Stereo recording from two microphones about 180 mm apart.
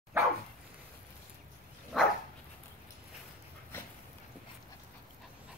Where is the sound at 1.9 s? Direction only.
Centre (ahead or behind).